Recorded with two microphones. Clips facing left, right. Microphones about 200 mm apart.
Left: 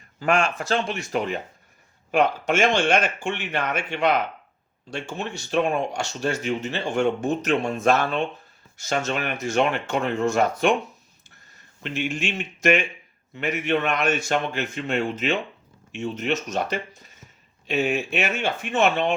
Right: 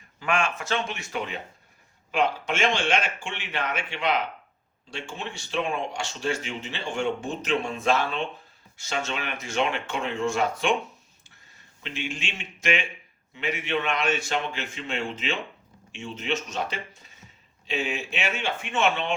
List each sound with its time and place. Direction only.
0.2 s speech: 35° left (ahead or behind)
11.8 s speech: 50° left (ahead or behind)